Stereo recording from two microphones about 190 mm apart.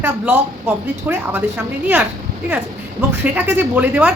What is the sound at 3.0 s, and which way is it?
A woman's voice, 10° right (ahead or behind).